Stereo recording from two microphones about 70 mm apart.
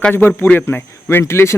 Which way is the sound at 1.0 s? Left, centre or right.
Left.